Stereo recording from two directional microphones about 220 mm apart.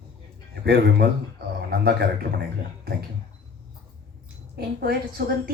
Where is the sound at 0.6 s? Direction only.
45° right (ahead or behind).